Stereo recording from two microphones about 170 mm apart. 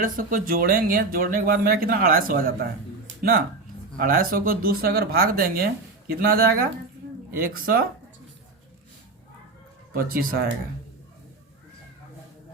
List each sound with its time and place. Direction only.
0.0 s speech: 50° right (ahead or behind)
3.9 s speech: 55° right (ahead or behind)
9.9 s speech: 60° right (ahead or behind)